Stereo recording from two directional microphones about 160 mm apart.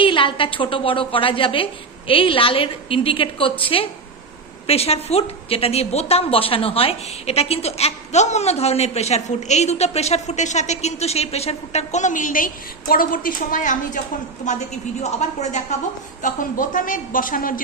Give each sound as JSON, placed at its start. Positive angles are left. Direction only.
{"t": 0.0, "sound": "a woman's voice", "side_deg": 35}
{"t": 16.2, "sound": "a woman's voice", "side_deg": 55}